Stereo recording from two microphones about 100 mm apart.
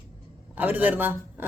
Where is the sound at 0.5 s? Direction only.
15° right (ahead or behind).